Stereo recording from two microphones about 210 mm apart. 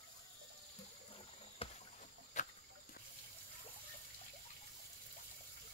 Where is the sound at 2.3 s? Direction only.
35° left (ahead or behind).